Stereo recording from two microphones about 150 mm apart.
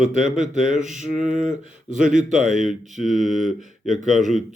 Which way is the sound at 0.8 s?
55° right (ahead or behind).